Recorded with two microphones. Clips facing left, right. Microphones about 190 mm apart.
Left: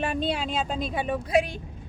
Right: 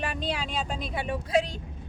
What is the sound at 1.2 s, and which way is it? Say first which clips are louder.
Speech: left 1 dB; 15° left (ahead or behind).